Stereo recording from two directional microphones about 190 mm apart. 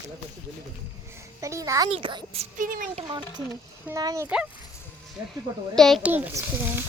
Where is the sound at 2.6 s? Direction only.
45° right (ahead or behind).